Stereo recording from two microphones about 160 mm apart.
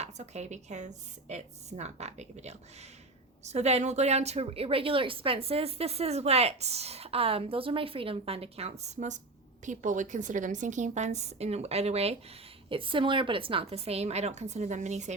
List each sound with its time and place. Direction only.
0.0 s a woman's voice: 45° right (ahead or behind)